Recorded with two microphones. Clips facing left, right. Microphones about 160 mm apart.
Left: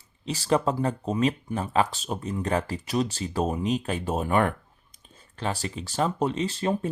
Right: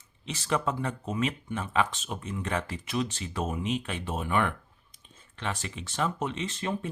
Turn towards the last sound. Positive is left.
turn(degrees=35)  # may be behind; listen again after turning